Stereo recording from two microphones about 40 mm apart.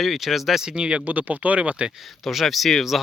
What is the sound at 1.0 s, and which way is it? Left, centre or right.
Speech, right.